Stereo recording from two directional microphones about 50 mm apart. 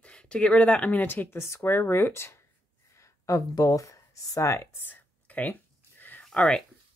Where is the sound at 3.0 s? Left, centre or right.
Left.